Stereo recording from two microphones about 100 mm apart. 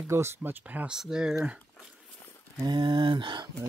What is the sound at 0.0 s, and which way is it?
Speech, 25° right (ahead or behind).